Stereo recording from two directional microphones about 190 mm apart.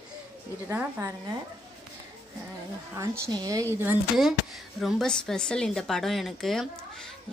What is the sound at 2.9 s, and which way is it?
Speech, 15° right (ahead or behind).